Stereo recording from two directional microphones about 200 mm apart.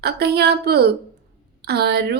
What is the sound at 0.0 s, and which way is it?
A woman's voice, 55° right (ahead or behind).